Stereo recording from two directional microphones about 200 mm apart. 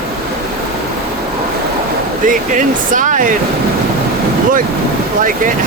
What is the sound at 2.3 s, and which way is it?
Speech, 40° right (ahead or behind).